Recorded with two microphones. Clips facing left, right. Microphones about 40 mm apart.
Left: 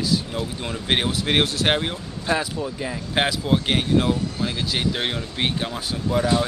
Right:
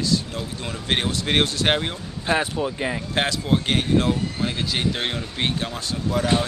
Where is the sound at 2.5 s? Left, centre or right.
Right.